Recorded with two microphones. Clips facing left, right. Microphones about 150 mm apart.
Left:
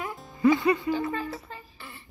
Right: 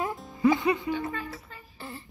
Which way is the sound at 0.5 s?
20° right (ahead or behind).